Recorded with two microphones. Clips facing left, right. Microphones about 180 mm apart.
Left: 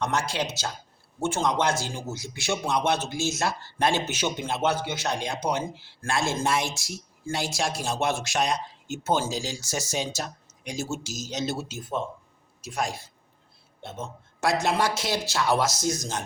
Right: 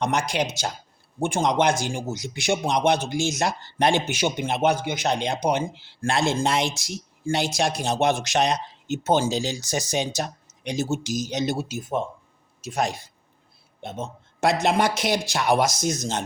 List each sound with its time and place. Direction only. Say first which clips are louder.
0.0 s a man's voice: right 3 dB; 15° right (ahead or behind)
12.6 s speech: right 4 dB; 20° right (ahead or behind)